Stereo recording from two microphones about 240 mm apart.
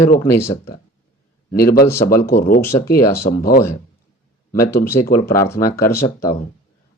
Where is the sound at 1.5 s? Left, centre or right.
Left.